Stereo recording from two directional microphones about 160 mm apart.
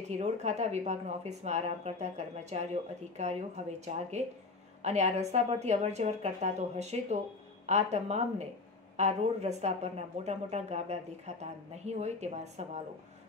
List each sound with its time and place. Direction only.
0.1 s a woman's voice: 45° right (ahead or behind)